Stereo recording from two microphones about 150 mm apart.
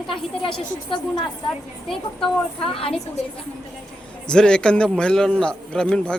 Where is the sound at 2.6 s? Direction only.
40° left (ahead or behind).